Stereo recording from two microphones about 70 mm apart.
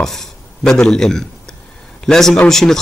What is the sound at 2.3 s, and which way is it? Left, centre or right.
Speech, centre.